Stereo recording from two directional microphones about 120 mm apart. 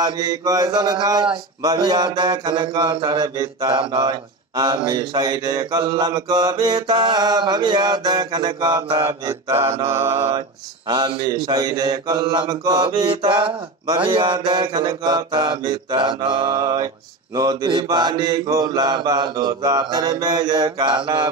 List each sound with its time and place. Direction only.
0.0 s speech: 30° right (ahead or behind)
9.3 s mantra: 20° right (ahead or behind)
10.9 s speech: 40° right (ahead or behind)